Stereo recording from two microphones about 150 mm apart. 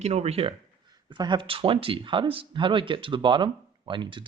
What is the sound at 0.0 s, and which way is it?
Speech, 45° right (ahead or behind).